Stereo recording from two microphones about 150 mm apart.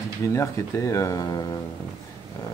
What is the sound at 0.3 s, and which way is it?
Speech, 20° left (ahead or behind).